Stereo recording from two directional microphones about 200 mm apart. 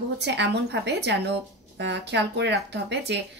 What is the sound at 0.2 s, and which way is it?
Speech, 60° right (ahead or behind).